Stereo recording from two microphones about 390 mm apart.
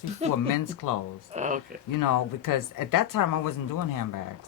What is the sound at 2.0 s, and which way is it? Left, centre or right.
Speech, left.